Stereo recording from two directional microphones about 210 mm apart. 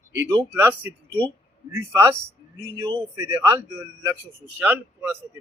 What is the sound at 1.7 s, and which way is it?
Speech, 10° right (ahead or behind).